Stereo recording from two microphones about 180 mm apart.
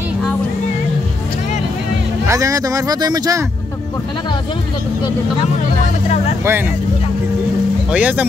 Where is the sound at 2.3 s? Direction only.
20° right (ahead or behind).